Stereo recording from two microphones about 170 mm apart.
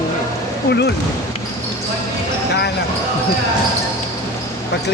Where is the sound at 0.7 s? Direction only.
80° left.